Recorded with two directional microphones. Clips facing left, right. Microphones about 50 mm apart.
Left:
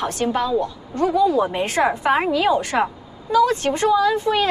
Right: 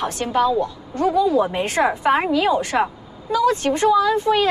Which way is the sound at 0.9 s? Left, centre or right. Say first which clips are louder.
Even; centre.